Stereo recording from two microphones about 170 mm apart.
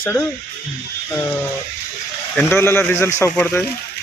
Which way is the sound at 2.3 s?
15° left (ahead or behind).